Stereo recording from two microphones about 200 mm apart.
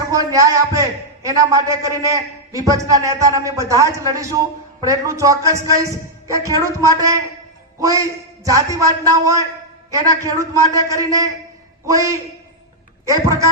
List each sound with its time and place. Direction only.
0.1 s a man's voice: 15° right (ahead or behind)